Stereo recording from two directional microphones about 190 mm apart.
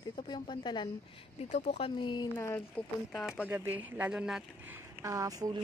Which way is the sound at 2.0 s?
25° left (ahead or behind).